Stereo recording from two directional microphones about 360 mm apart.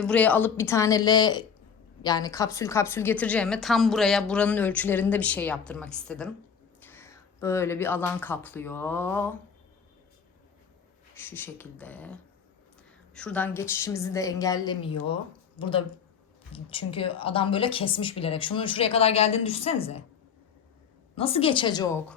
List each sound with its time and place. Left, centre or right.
0.0 s a woman's voice: centre
11.2 s a woman's voice: centre
21.2 s speech: centre